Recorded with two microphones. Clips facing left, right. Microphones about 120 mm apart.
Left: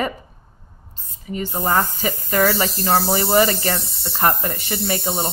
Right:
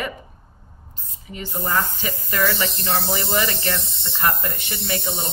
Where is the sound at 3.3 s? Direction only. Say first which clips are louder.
Left 8 dB; 35° left (ahead or behind).